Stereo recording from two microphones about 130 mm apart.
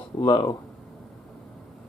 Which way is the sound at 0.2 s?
30° left (ahead or behind).